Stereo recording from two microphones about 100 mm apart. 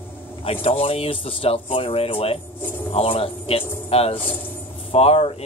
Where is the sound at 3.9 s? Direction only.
80° left.